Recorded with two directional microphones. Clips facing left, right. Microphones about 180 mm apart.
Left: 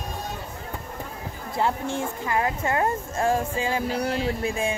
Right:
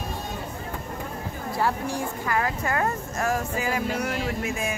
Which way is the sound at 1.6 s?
25° left (ahead or behind).